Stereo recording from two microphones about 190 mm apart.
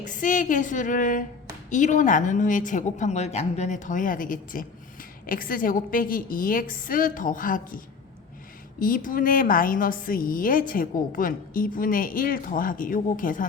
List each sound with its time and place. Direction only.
0.0 s a woman's voice: 45° left (ahead or behind)
8.8 s a woman's voice: 45° left (ahead or behind)